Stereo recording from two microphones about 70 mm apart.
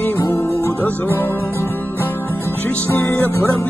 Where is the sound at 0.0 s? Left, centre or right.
Left.